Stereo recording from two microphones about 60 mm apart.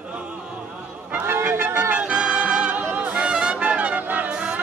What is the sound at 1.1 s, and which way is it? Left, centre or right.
Music, right.